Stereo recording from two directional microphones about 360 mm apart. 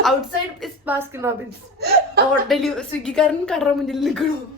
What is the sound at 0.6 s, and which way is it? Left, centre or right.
Speech, centre.